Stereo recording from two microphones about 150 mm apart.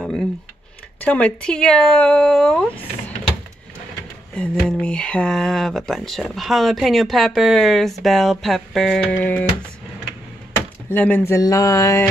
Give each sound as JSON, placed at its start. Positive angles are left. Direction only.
{"t": 1.0, "sound": "speech", "side_deg": 10}
{"t": 4.4, "sound": "speech", "side_deg": 5}
{"t": 10.9, "sound": "speech", "side_deg": 15}